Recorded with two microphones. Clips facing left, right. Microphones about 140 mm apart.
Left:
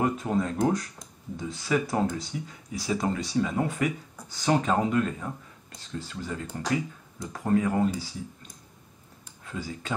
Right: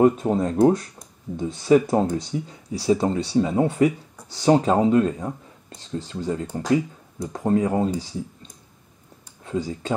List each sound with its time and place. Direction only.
0.0 s speech: 30° right (ahead or behind)